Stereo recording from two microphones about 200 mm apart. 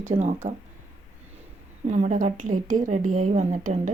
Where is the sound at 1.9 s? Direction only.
35° right (ahead or behind).